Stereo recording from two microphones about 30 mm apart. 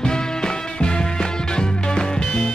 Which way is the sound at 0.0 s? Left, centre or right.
Left.